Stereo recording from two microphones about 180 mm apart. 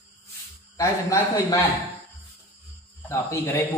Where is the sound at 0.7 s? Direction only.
15° left (ahead or behind).